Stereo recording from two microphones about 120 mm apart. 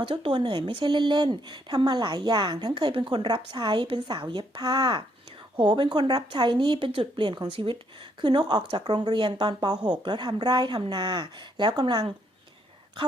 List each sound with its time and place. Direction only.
0.0 s speech: 50° right (ahead or behind)
5.5 s speech: 45° right (ahead or behind)